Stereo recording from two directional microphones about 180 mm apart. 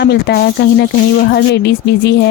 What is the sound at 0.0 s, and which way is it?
Speech, 65° left (ahead or behind).